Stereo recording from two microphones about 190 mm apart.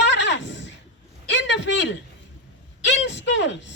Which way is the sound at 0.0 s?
70° left (ahead or behind).